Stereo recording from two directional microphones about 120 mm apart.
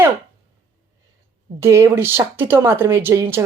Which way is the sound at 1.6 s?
25° right (ahead or behind).